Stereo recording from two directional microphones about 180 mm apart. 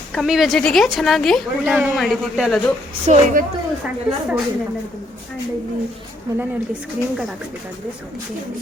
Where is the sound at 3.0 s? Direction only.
45° right (ahead or behind).